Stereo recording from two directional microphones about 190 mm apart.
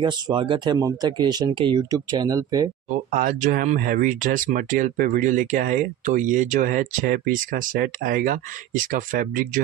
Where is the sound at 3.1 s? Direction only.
45° right (ahead or behind).